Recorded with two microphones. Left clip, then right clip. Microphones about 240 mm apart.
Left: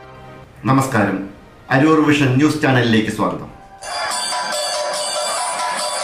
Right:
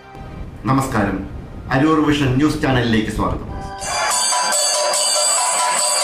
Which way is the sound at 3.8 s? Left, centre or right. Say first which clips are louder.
Right 3 dB; right.